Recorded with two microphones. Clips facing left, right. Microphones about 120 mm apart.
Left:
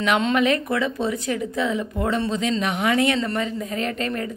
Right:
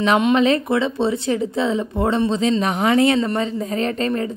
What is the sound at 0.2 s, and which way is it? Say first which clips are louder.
Speech: right 4 dB; 25° right (ahead or behind).